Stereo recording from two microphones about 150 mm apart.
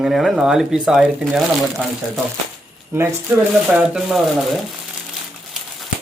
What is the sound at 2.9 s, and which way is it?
Speech, 15° right (ahead or behind).